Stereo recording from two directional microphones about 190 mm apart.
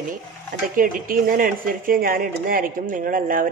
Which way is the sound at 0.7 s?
45° right (ahead or behind).